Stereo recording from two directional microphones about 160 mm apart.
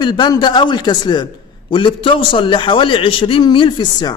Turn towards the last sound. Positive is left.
turn(degrees=25)  # may be behind; listen again after turning